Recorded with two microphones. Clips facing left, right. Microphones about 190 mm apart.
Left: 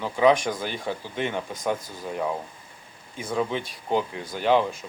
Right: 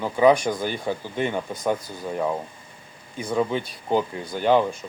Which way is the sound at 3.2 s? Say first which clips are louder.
Right 3 dB; centre (ahead or behind).